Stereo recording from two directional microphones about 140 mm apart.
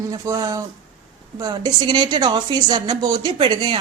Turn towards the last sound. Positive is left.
turn(degrees=-35)  # may be behind; listen again after turning